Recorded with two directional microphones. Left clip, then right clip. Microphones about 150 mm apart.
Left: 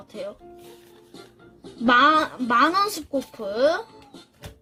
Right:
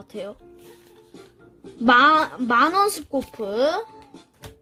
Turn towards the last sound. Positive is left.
turn(degrees=-50)  # may be behind; listen again after turning